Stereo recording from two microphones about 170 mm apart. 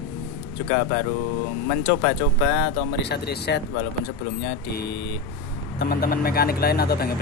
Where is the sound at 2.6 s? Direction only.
85° left.